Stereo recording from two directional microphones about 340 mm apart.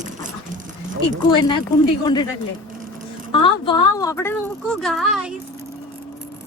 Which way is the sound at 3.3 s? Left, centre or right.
Centre.